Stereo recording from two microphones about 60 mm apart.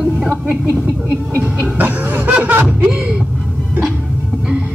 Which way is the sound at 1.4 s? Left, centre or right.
Right.